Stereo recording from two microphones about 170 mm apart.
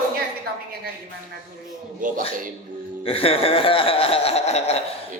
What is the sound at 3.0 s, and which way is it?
Speech, 35° left (ahead or behind).